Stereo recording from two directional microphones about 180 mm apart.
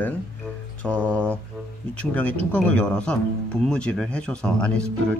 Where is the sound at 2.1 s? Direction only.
10° left (ahead or behind).